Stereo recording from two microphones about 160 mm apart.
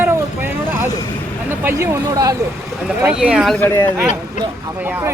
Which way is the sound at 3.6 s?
20° left (ahead or behind).